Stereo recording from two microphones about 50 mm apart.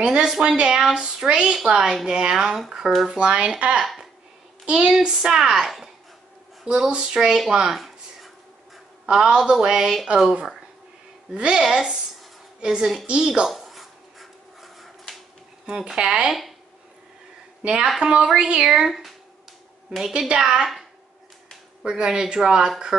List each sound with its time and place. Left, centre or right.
0.0 s a child's voice: centre
3.8 s a child's voice: centre
7.7 s a sound: centre
9.1 s a child's voice: centre
11.3 s a child's voice: right
13.5 s writing: centre
15.6 s a child's voice: right
16.3 s speech: centre
17.8 s a child's voice: centre
18.7 s a child's voice: centre
21.8 s a child's voice: centre